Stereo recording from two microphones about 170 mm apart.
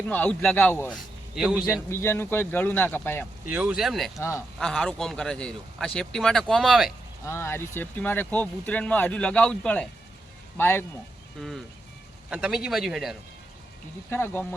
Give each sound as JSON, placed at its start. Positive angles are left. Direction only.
{"t": 0.1, "sound": "speech", "side_deg": 5}
{"t": 1.4, "sound": "a man's voice", "side_deg": -5}
{"t": 1.9, "sound": "speech", "side_deg": 15}
{"t": 3.4, "sound": "a man's voice", "side_deg": -10}
{"t": 4.2, "sound": "speech", "side_deg": 15}
{"t": 4.6, "sound": "a man's voice", "side_deg": 5}
{"t": 7.3, "sound": "speech", "side_deg": 15}
{"t": 11.3, "sound": "a man's voice", "side_deg": 0}
{"t": 14.1, "sound": "speech", "side_deg": 15}